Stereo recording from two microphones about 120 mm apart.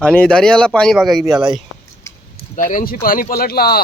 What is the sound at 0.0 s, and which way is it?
Speech, 10° left (ahead or behind).